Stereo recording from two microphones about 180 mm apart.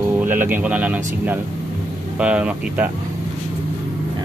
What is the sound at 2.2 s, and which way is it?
Speech, 5° right (ahead or behind).